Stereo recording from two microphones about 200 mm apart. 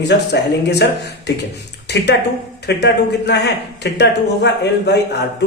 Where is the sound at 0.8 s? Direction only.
60° left (ahead or behind).